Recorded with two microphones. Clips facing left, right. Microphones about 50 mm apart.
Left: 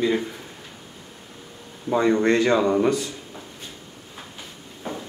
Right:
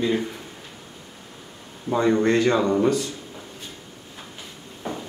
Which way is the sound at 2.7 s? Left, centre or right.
Centre.